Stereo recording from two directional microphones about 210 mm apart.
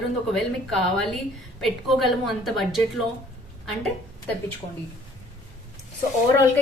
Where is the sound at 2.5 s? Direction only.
Centre (ahead or behind).